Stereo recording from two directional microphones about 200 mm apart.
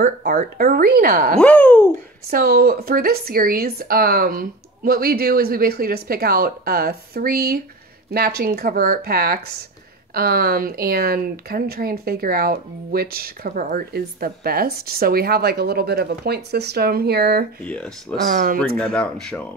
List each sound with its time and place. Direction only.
0.0 s speech: 40° right (ahead or behind)
1.4 s speech: 5° left (ahead or behind)
2.3 s speech: 50° right (ahead or behind)
17.6 s speech: 5° left (ahead or behind)
18.3 s speech: 45° right (ahead or behind)
18.8 s speech: 5° left (ahead or behind)